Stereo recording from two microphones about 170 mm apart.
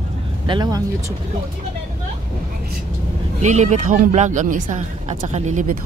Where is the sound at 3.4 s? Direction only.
45° right (ahead or behind).